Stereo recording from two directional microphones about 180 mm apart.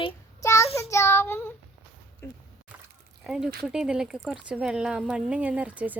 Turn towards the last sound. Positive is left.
turn(degrees=-10)  # may be behind; listen again after turning